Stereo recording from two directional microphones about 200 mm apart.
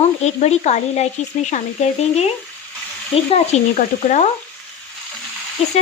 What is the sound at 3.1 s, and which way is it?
Speech, 30° left (ahead or behind).